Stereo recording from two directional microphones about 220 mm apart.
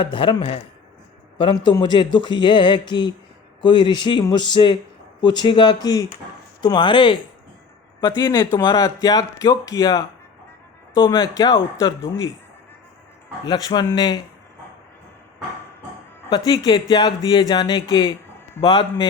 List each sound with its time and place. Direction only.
0.0 s speech: 25° left (ahead or behind)
13.4 s speech: 20° left (ahead or behind)
16.5 s speech: 15° left (ahead or behind)